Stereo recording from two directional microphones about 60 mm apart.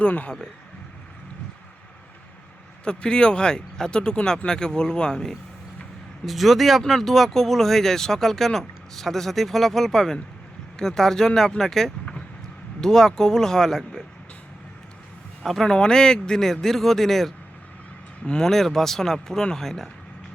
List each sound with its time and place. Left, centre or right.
0.0 s speech: left
2.8 s speech: centre
6.2 s speech: centre
15.4 s speech: centre